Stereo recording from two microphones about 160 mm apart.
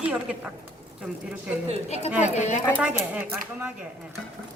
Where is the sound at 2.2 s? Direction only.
45° left (ahead or behind).